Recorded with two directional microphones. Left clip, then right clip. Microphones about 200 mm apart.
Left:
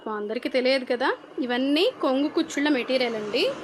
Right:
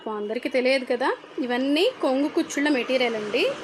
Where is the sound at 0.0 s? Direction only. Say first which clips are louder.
Right 1 dB; 5° right (ahead or behind).